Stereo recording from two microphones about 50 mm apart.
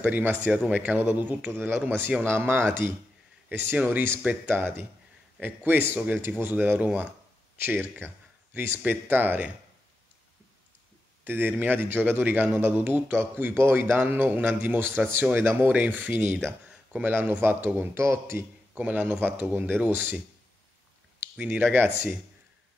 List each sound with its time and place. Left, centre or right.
0.0 s speech: right
3.4 s speech: right
11.2 s speech: right
15.3 s speech: right
15.7 s speech: right
16.6 s a sound: right
17.0 s speech: right
17.9 s a man's voice: right
18.8 s speech: right
19.1 s speech: right
21.4 s speech: right